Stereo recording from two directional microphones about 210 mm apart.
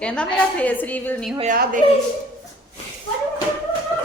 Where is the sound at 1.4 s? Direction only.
40° right (ahead or behind).